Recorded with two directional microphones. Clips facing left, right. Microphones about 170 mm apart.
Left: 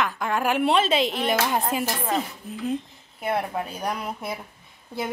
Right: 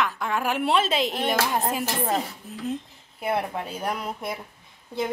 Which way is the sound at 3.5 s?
Centre (ahead or behind).